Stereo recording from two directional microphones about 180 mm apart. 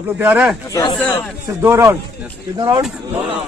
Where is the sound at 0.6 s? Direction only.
20° left (ahead or behind).